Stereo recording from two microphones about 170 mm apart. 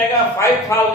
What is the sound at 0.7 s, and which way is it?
Speech, 15° left (ahead or behind).